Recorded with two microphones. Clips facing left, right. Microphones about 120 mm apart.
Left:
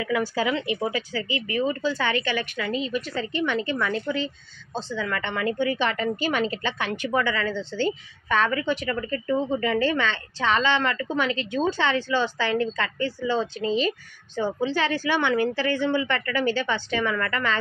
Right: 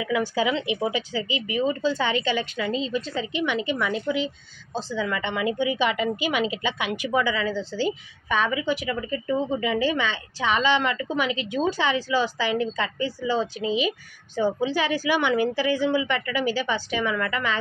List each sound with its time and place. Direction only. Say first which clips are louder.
0.0 s a woman's voice: right 1 dB; 20° right (ahead or behind)